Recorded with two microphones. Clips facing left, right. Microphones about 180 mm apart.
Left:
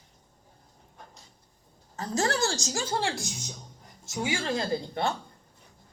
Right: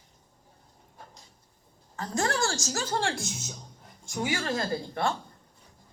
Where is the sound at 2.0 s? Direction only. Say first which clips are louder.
Left 1 dB; 25° left (ahead or behind).